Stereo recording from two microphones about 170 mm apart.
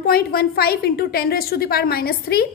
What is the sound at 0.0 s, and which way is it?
A woman's voice, 65° left (ahead or behind).